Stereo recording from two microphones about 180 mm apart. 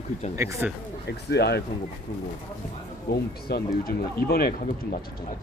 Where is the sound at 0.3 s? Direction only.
15° right (ahead or behind).